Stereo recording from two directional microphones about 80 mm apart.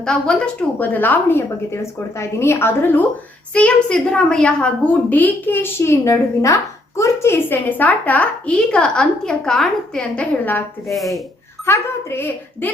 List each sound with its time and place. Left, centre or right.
0.0 s a woman's voice: centre; by 3.0 s left
3.8 s a woman's voice: centre
11.6 s a woman's voice: left